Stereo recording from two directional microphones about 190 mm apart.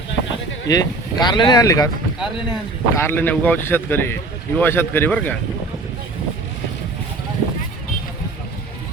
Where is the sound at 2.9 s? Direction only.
10° left (ahead or behind).